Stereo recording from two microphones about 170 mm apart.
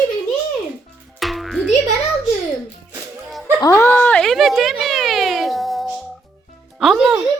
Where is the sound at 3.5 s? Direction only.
20° left (ahead or behind); by 5.9 s centre (ahead or behind).